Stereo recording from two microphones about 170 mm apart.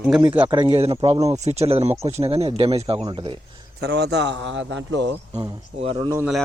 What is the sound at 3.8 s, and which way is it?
A man's voice, 80° right.